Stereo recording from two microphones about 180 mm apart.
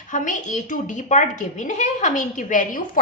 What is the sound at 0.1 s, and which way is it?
A woman's voice, 45° left (ahead or behind).